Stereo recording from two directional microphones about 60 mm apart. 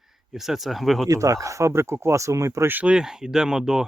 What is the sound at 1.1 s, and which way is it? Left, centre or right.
Speech, right.